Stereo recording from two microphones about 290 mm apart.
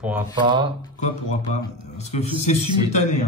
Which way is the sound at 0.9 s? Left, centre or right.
Left.